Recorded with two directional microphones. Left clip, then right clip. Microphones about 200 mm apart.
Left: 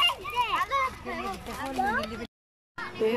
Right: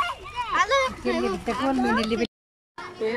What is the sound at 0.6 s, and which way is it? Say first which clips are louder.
Children playing: right 6 dB; 55° right (ahead or behind).